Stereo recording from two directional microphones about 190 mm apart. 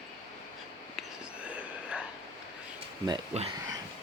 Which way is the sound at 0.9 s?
5° right (ahead or behind).